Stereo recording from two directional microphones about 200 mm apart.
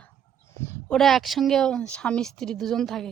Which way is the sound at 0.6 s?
10° left (ahead or behind).